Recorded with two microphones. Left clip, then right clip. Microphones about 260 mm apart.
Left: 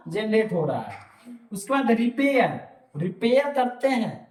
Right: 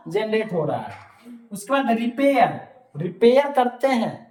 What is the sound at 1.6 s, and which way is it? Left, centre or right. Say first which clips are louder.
Speech: right 2 dB; centre.